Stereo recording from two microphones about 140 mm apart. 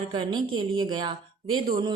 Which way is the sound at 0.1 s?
35° right (ahead or behind).